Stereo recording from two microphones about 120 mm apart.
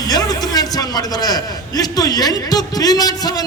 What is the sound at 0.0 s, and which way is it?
A man's voice, 30° left (ahead or behind).